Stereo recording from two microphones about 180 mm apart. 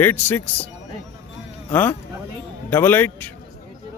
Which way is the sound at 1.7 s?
10° left (ahead or behind).